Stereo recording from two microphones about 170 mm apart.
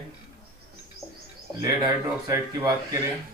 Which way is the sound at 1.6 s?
20° right (ahead or behind).